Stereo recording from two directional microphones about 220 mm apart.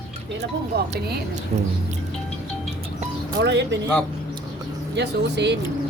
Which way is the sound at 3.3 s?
50° right (ahead or behind).